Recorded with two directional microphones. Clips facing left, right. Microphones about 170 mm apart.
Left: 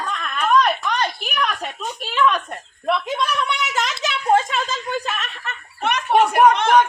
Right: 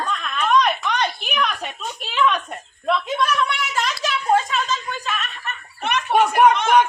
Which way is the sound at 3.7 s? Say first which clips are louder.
Even; 20° left (ahead or behind).